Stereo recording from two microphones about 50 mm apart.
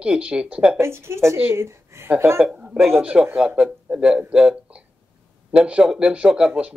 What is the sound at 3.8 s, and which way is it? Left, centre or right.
Speech, centre.